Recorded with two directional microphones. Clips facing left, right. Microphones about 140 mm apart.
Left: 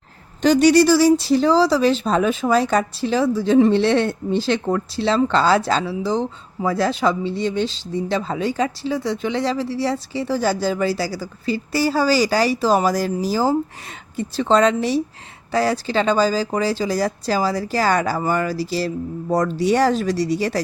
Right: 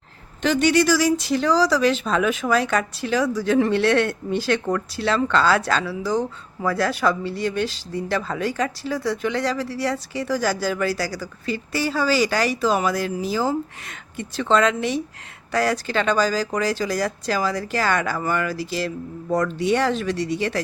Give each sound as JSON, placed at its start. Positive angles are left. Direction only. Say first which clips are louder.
{"t": 0.4, "sound": "speech", "louder": "left 5 dB", "side_deg": 35}